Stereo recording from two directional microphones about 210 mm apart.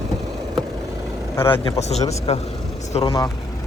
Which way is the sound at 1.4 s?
25° left (ahead or behind).